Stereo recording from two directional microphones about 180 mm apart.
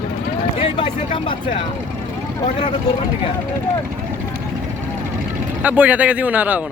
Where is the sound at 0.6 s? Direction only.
25° left (ahead or behind).